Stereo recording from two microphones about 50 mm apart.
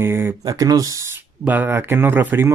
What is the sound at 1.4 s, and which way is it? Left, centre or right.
Speech, right.